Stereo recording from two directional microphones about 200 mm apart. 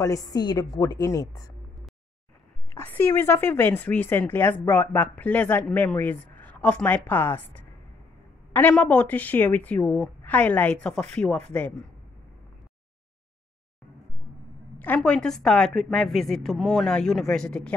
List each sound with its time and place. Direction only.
0.0 s a woman's voice: 15° left (ahead or behind)
2.7 s a woman's voice: 10° left (ahead or behind)
8.5 s a woman's voice: 5° left (ahead or behind)
14.8 s a woman's voice: 5° left (ahead or behind)